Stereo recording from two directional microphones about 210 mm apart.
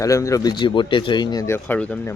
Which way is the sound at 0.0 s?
15° left (ahead or behind).